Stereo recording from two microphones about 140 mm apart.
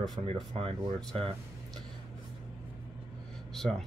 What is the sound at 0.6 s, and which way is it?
Speech, 40° right (ahead or behind).